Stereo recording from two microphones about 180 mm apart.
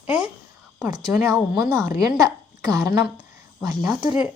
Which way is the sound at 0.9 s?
20° right (ahead or behind).